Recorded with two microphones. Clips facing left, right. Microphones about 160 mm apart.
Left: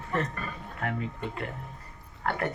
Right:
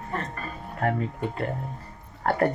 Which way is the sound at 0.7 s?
40° right (ahead or behind).